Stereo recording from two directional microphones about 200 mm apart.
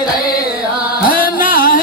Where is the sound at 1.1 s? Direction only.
45° left (ahead or behind).